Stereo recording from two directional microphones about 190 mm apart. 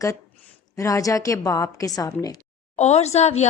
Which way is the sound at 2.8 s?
35° left (ahead or behind).